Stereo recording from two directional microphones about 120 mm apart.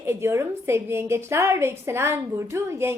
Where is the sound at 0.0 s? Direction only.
20° right (ahead or behind).